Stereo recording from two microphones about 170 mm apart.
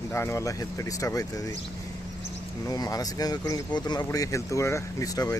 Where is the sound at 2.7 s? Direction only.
20° left (ahead or behind).